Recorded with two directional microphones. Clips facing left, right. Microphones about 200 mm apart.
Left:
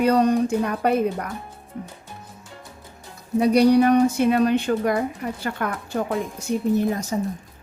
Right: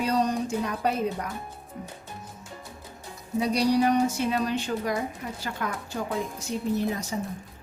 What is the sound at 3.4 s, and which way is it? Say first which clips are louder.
Speech: left 7 dB; 60° left (ahead or behind).